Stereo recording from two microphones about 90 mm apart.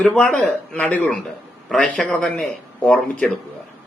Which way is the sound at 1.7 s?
5° left (ahead or behind).